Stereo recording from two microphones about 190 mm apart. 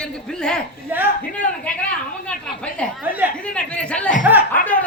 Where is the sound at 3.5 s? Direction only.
5° left (ahead or behind).